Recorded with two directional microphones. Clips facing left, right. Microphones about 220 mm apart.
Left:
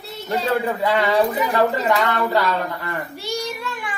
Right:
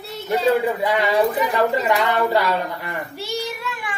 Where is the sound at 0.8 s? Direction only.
15° right (ahead or behind).